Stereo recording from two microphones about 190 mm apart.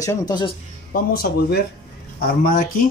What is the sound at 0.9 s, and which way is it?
Speech, 50° left (ahead or behind).